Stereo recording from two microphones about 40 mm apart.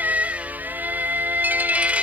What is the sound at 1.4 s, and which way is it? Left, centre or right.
Music, right.